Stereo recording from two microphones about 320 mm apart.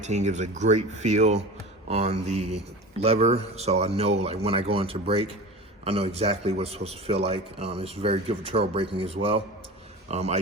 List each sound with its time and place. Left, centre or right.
0.0 s a man's voice: right